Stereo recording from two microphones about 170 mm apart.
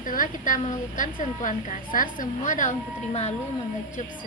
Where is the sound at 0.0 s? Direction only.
50° left (ahead or behind).